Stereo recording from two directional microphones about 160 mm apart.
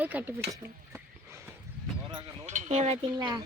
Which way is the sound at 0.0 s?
10° right (ahead or behind).